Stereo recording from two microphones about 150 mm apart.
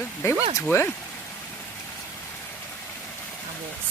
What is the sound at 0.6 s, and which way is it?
Speech, 15° left (ahead or behind).